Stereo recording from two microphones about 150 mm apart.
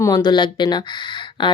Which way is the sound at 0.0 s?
25° left (ahead or behind).